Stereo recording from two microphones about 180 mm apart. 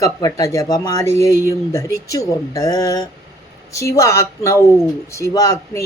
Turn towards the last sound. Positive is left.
turn(degrees=20)  # may be behind; listen again after turning